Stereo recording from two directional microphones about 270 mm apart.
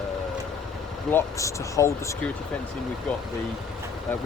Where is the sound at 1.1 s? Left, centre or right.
Centre.